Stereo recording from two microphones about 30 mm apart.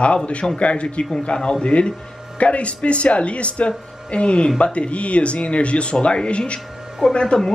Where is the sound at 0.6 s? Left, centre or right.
Left.